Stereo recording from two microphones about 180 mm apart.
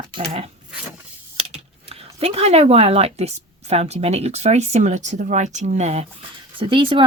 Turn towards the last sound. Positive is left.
turn(degrees=-30)  # may be behind; listen again after turning